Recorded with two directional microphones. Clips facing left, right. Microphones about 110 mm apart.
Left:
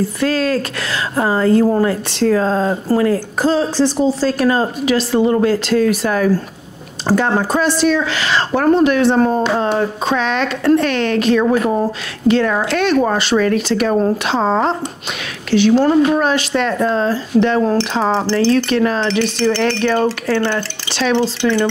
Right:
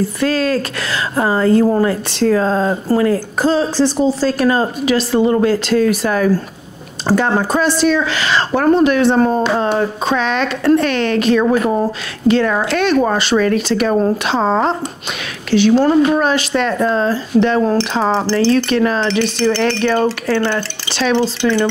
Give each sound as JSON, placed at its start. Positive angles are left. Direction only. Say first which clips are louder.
{"t": 0.2, "sound": "speech", "louder": "right 1 dB", "side_deg": -20}
{"t": 7.6, "sound": "speech", "louder": "right 1 dB", "side_deg": -15}